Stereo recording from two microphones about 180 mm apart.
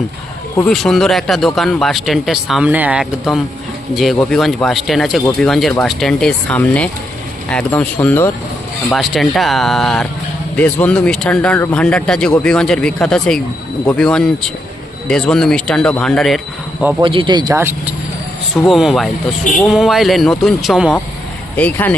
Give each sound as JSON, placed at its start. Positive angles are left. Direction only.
{"t": 0.7, "sound": "speech", "side_deg": 0}
{"t": 17.0, "sound": "speech", "side_deg": -30}
{"t": 18.6, "sound": "speech", "side_deg": 0}
{"t": 21.5, "sound": "speech", "side_deg": 10}